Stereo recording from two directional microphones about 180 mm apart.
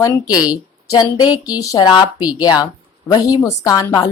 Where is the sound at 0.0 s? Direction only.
20° left (ahead or behind).